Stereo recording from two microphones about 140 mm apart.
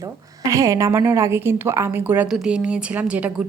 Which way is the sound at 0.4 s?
25° right (ahead or behind).